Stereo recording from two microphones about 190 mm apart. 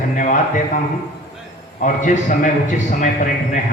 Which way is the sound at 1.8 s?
40° left (ahead or behind).